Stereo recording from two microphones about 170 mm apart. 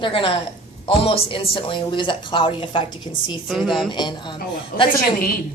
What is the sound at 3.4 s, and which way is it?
Speech, centre (ahead or behind).